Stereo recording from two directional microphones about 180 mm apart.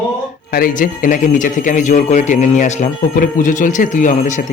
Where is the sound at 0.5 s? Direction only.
50° left (ahead or behind).